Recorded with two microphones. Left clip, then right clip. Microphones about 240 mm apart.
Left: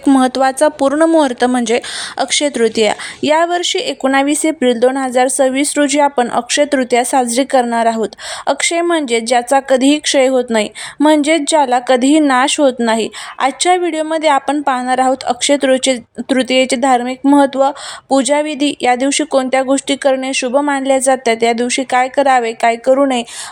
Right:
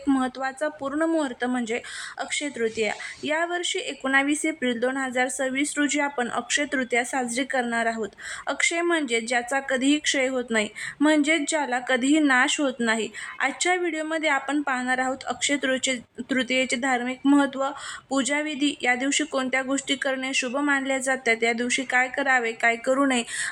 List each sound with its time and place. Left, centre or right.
0.1 s speech: left; by 23.2 s centre